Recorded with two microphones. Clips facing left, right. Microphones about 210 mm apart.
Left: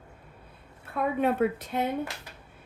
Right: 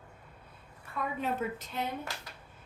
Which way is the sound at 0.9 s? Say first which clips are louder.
Left 8 dB; 60° left (ahead or behind).